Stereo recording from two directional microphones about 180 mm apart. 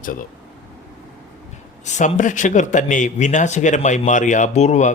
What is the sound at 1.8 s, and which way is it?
Speech, 40° left (ahead or behind).